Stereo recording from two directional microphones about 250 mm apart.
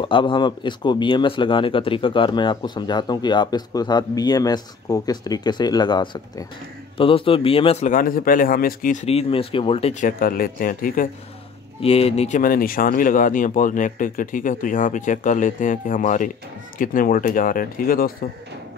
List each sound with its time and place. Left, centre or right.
0.0 s a man's voice: centre; by 18.1 s left